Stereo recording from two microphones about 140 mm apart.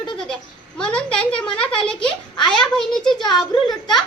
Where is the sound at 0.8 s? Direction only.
5° left (ahead or behind).